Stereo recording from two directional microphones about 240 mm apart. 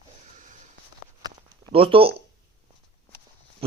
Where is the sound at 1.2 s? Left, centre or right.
Right.